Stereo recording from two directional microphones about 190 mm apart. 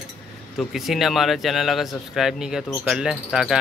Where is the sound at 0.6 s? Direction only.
Centre (ahead or behind).